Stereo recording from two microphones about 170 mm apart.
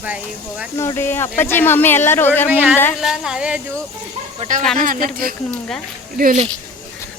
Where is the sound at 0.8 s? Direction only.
15° left (ahead or behind).